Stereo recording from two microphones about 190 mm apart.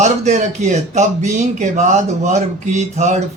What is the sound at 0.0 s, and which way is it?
Speech, 40° right (ahead or behind).